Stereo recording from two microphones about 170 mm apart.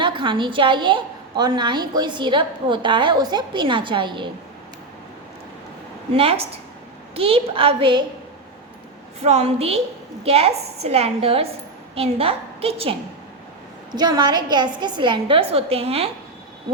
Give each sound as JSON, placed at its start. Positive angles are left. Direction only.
{"t": 0.0, "sound": "a woman's voice", "side_deg": -30}
{"t": 6.1, "sound": "a woman's voice", "side_deg": -35}
{"t": 9.2, "sound": "a woman's voice", "side_deg": -40}
{"t": 13.9, "sound": "a woman's voice", "side_deg": -25}